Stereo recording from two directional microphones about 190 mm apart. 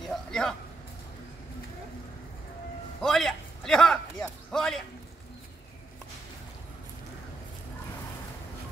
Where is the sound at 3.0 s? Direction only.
Centre (ahead or behind).